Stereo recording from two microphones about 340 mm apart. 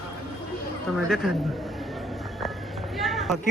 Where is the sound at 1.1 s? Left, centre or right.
Centre.